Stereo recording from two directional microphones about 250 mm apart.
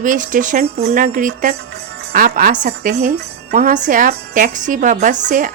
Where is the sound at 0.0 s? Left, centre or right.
Right.